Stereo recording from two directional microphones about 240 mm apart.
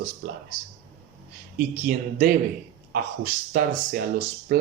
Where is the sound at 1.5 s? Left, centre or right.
Right.